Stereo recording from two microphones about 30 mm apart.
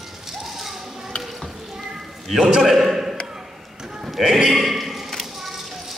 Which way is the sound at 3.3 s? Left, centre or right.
Centre.